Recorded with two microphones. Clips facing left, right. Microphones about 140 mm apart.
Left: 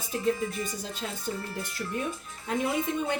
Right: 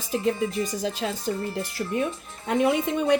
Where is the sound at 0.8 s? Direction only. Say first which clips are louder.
Right 9 dB; 90° right.